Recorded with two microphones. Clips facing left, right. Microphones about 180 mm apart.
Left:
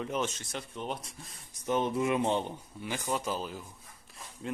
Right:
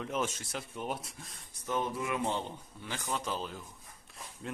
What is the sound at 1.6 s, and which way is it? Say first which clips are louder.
Speech: left 5 dB; 20° left (ahead or behind).